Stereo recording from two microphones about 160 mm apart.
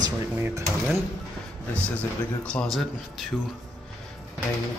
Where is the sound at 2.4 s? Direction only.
5° left (ahead or behind).